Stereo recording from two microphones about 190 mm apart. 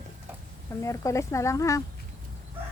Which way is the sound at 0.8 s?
15° left (ahead or behind).